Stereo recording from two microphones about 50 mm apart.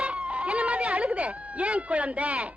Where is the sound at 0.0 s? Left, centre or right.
Right.